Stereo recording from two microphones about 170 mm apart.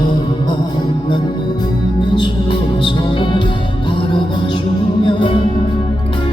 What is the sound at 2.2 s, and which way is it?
Music, 30° left (ahead or behind).